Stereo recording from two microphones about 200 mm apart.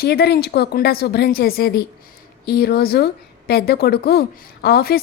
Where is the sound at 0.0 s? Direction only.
55° left (ahead or behind).